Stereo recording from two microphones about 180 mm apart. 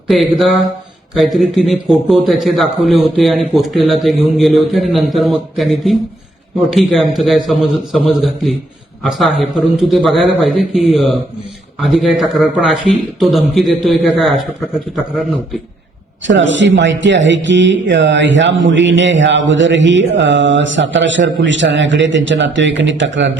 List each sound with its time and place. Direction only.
0.1 s a man's voice: centre (ahead or behind)
9.0 s a man's voice: centre (ahead or behind)
16.2 s speech: 90° right